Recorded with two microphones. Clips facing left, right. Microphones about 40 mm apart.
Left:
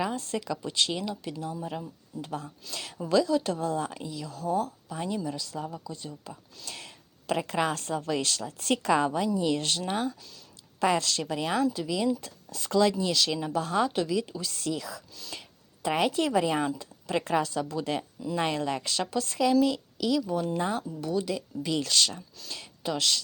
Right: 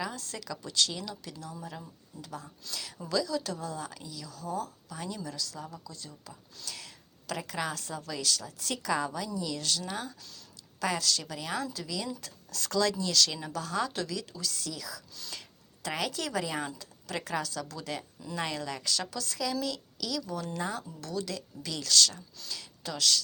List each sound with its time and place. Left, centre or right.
0.0 s a woman's voice: left
11.6 s speech: left
13.9 s speech: centre; by 15.0 s left
15.3 s a sound: centre
15.9 s speech: left
20.6 s speech: left
21.0 s speech: centre